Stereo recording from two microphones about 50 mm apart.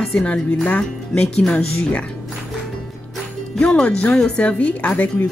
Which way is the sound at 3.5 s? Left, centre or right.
Left.